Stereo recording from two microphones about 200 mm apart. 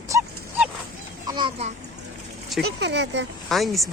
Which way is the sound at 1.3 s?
25° right (ahead or behind).